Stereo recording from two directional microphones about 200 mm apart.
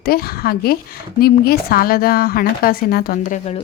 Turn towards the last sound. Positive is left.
turn(degrees=40)  # may be behind; listen again after turning